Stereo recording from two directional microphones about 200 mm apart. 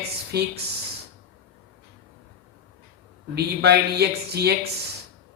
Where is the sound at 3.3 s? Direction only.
55° right (ahead or behind).